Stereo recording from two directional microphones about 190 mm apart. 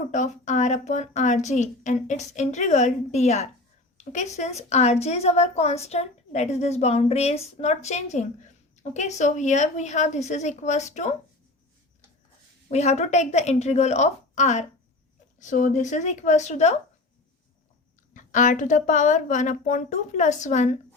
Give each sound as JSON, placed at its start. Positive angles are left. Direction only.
{"t": 0.1, "sound": "a woman's voice", "side_deg": 40}
{"t": 12.7, "sound": "a woman's voice", "side_deg": 35}
{"t": 18.1, "sound": "a woman's voice", "side_deg": 40}